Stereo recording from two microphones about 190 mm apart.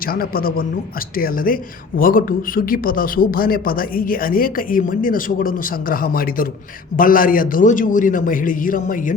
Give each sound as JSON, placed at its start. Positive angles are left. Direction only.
{"t": 0.0, "sound": "speech", "side_deg": 50}